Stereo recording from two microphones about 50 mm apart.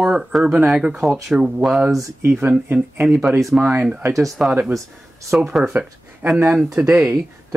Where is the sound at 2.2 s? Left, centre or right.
Right.